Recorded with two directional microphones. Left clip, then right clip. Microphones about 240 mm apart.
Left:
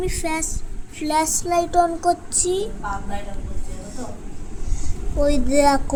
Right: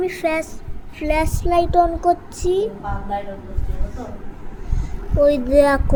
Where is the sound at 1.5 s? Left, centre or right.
Left.